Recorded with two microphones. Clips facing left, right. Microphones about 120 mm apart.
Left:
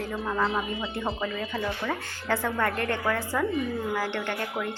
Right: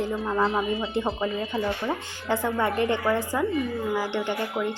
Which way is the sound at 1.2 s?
25° right (ahead or behind).